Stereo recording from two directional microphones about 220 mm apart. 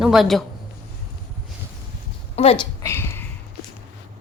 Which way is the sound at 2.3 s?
25° left (ahead or behind).